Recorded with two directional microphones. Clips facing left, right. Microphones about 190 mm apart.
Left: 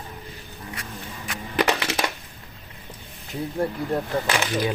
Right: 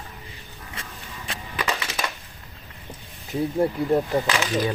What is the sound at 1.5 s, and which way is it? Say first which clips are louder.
Crushing: left 7 dB; 70° left (ahead or behind).